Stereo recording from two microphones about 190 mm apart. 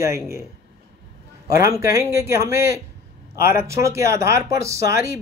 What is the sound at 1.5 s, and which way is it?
Speech, 15° right (ahead or behind).